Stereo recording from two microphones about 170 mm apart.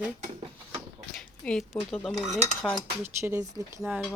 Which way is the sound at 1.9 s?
Centre (ahead or behind).